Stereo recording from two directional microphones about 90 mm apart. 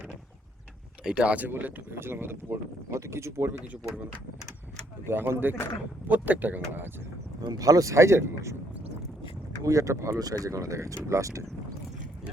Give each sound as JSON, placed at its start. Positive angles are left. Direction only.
{"t": 1.0, "sound": "speech", "side_deg": -15}
{"t": 5.0, "sound": "speech", "side_deg": -25}
{"t": 7.4, "sound": "speech", "side_deg": -45}
{"t": 9.6, "sound": "speech", "side_deg": -35}